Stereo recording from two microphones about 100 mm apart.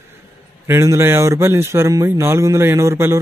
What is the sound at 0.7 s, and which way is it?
A man's voice, 25° right (ahead or behind).